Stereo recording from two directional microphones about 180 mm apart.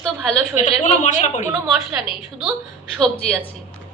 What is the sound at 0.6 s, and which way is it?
Speech, 40° left (ahead or behind).